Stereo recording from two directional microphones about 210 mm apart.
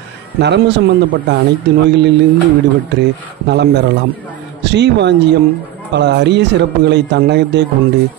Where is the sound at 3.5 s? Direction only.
55° right (ahead or behind).